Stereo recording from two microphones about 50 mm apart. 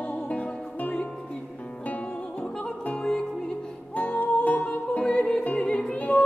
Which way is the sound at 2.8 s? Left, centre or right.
Left.